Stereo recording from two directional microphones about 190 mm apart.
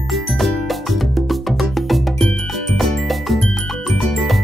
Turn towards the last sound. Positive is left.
turn(degrees=0)  # may be behind; listen again after turning